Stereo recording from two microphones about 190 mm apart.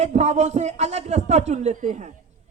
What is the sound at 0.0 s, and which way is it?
Speech, 35° right (ahead or behind).